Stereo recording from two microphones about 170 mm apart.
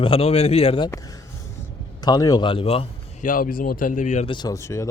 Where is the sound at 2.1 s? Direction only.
20° left (ahead or behind).